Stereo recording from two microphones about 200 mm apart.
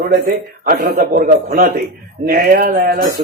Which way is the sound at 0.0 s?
45° right (ahead or behind).